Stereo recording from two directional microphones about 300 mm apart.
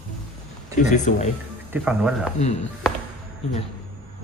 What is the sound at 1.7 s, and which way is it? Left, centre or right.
Speech, centre.